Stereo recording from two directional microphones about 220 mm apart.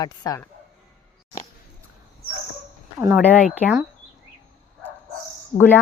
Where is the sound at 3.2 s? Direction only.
5° left (ahead or behind).